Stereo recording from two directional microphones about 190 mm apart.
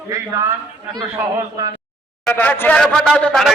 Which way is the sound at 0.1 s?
15° right (ahead or behind).